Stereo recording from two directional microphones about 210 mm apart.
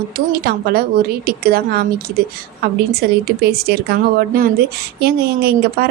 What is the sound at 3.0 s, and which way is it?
A woman's voice, 50° right (ahead or behind).